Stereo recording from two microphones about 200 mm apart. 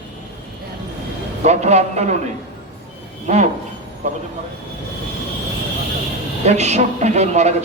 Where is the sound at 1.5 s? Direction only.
35° right (ahead or behind).